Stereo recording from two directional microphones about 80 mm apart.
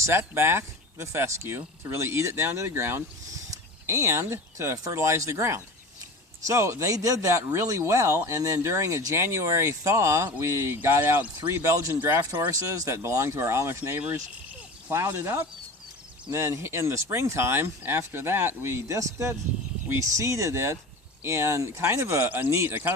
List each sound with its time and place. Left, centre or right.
0.0 s speech: right
12.5 s speech: right